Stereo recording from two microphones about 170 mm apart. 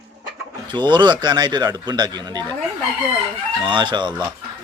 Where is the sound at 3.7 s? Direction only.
30° right (ahead or behind).